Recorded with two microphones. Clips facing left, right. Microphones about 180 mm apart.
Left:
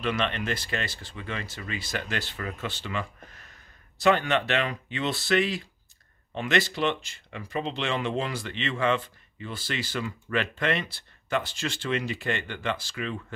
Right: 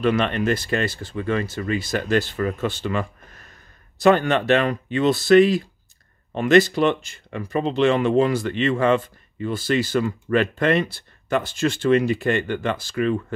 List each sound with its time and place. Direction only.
0.0 s speech: 50° right (ahead or behind)